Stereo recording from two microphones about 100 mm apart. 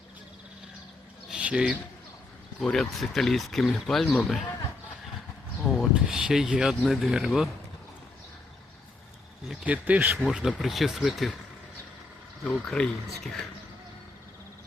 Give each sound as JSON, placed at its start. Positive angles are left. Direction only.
{"t": 1.3, "sound": "a sound", "side_deg": -10}
{"t": 2.6, "sound": "speech", "side_deg": 5}
{"t": 5.6, "sound": "speech", "side_deg": 0}
{"t": 9.6, "sound": "speech", "side_deg": -15}
{"t": 10.2, "sound": "speech", "side_deg": -5}
{"t": 12.5, "sound": "speech", "side_deg": 10}